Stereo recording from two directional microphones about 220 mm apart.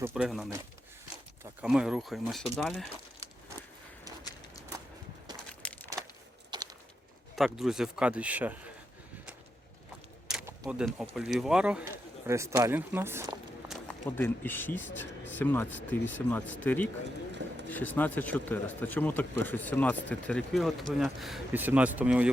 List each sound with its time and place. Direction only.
0.0 s speech: 5° right (ahead or behind)
1.6 s speech: 5° right (ahead or behind)
4.2 s walk: 15° left (ahead or behind)
5.6 s crumpling: 5° left (ahead or behind)
6.5 s a sound: 20° right (ahead or behind)
7.3 s speech: centre (ahead or behind)
10.2 s a sound: 5° right (ahead or behind)
10.7 s speech: 5° right (ahead or behind)
14.2 s speech: 10° left (ahead or behind)